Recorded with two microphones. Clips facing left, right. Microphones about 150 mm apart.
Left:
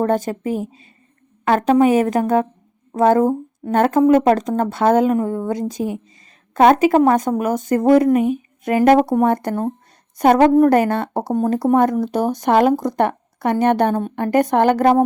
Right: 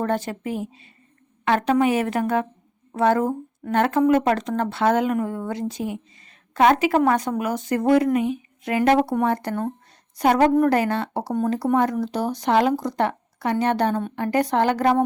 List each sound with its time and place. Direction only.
0.0 s a woman's voice: 40° left (ahead or behind)